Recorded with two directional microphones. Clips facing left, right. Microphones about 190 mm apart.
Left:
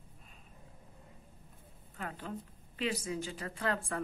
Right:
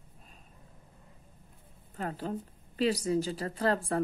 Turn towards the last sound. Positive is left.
turn(degrees=-35)  # may be behind; listen again after turning